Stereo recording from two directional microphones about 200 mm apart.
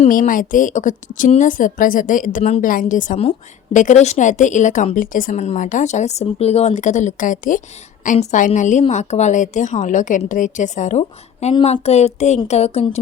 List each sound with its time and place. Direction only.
0.0 s a woman's voice: 45° left (ahead or behind)